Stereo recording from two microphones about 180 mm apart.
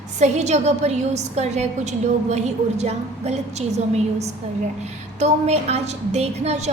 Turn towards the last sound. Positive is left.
turn(degrees=-35)  # may be behind; listen again after turning